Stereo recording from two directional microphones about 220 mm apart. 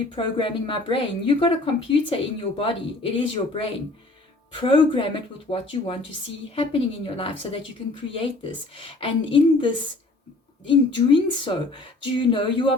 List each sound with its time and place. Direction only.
0.2 s a woman's voice: 25° left (ahead or behind)